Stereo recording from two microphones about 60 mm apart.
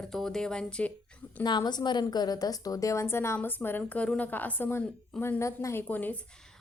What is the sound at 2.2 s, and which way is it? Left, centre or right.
Speech, left.